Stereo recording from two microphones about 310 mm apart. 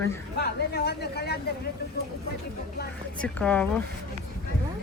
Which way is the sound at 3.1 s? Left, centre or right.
Centre.